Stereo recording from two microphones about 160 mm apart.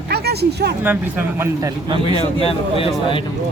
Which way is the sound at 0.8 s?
10° right (ahead or behind).